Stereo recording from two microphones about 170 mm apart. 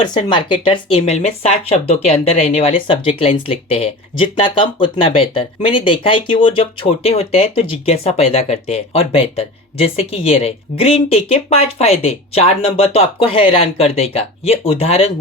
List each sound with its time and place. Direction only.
0.1 s speech: 30° left (ahead or behind)